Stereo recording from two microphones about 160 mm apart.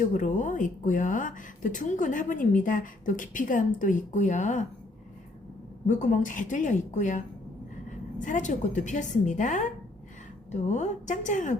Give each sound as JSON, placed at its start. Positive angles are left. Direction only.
{"t": 0.1, "sound": "a woman's voice", "side_deg": 55}
{"t": 5.9, "sound": "a woman's voice", "side_deg": 50}